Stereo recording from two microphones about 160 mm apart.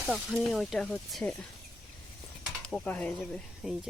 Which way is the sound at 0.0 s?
5° right (ahead or behind).